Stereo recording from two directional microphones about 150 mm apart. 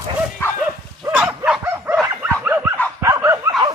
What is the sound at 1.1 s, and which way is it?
Dog, 5° right (ahead or behind).